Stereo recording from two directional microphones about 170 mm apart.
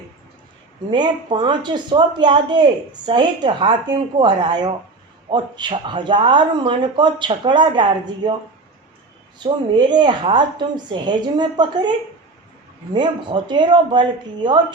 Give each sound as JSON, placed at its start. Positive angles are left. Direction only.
{"t": 0.9, "sound": "speech", "side_deg": -25}
{"t": 9.4, "sound": "speech", "side_deg": -25}